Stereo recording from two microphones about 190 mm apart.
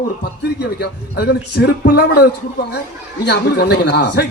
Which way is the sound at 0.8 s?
55° left (ahead or behind).